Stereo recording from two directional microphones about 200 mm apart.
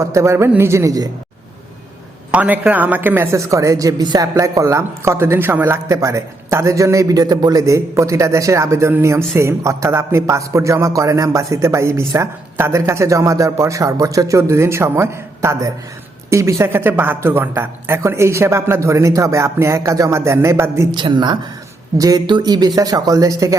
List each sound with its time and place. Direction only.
0.0 s a woman's voice: 15° right (ahead or behind)
2.3 s a woman's voice: 10° right (ahead or behind)